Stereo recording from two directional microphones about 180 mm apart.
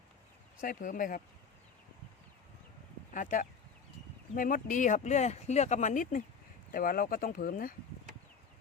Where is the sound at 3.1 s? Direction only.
45° left (ahead or behind).